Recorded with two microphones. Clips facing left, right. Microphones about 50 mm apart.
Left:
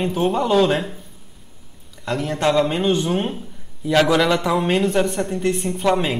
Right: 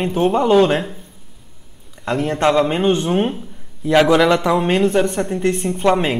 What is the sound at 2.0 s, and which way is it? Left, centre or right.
A man's voice, right.